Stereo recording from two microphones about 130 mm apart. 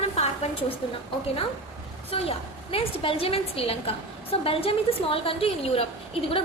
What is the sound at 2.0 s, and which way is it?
A woman's voice, 45° left (ahead or behind).